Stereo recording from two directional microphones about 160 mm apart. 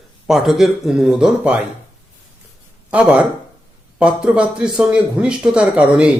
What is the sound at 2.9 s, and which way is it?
Speech, 5° right (ahead or behind).